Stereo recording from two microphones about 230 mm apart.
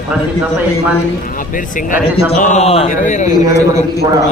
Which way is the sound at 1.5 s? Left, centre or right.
Left.